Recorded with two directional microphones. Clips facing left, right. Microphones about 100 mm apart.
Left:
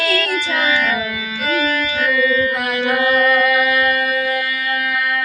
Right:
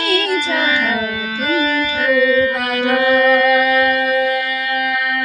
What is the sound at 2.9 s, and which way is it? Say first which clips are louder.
Music: right 3 dB; 40° right (ahead or behind).